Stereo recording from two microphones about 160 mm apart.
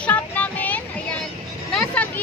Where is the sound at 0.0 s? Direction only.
10° left (ahead or behind).